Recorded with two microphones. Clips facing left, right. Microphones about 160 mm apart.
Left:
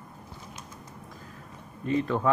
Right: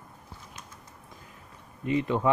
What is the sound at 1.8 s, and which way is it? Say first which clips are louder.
Speech: even; 15° right (ahead or behind).